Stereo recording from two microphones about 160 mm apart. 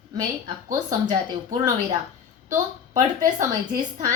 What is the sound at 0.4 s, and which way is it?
Speech, 25° right (ahead or behind).